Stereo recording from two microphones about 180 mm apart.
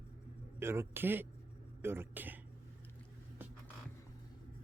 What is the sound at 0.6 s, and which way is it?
A man's voice, 15° right (ahead or behind).